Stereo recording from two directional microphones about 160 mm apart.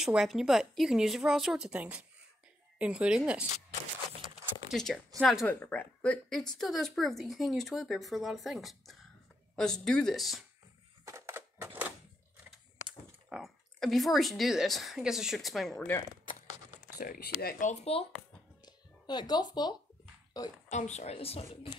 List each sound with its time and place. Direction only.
0.0 s a woman's voice: 5° right (ahead or behind)
4.6 s speech: 5° left (ahead or behind)
11.1 s a sound: 20° right (ahead or behind)
13.3 s speech: centre (ahead or behind)
17.0 s speech: 65° left (ahead or behind)
17.6 s speech: 40° left (ahead or behind)
18.6 s a sound: 25° left (ahead or behind)
20.7 s speech: 45° left (ahead or behind)